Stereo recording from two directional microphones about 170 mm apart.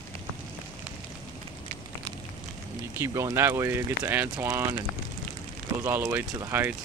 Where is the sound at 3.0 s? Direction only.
20° right (ahead or behind).